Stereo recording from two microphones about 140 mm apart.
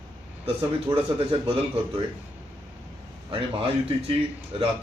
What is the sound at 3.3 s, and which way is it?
A man's voice, 40° right (ahead or behind).